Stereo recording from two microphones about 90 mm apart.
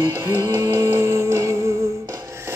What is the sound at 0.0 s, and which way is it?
Music, 35° right (ahead or behind).